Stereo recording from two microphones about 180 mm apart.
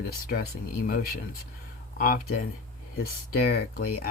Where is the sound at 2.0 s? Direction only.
50° left (ahead or behind).